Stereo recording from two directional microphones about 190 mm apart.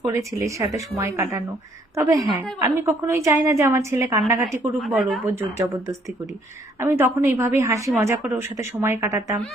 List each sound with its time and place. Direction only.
0.0 s a woman's voice: 15° right (ahead or behind)
4.8 s speech: centre (ahead or behind)
5.2 s a woman's voice: 15° right (ahead or behind)